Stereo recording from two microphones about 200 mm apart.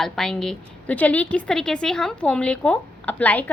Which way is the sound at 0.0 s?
Centre (ahead or behind).